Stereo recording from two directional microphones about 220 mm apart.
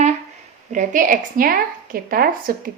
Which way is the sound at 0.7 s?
35° right (ahead or behind).